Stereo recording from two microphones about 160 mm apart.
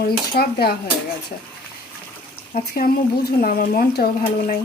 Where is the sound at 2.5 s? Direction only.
65° left (ahead or behind).